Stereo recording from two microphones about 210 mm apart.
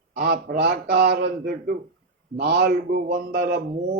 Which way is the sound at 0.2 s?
45° right (ahead or behind).